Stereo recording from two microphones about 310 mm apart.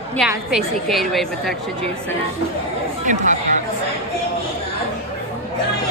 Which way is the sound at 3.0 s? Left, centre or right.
Right.